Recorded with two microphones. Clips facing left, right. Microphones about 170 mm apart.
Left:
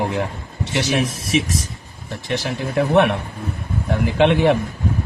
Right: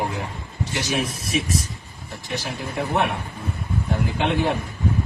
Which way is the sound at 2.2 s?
90° left.